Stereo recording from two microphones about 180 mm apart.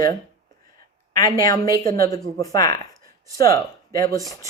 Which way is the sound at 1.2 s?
20° left (ahead or behind).